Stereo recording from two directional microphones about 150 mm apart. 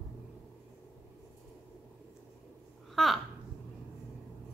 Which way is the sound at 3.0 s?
Centre (ahead or behind).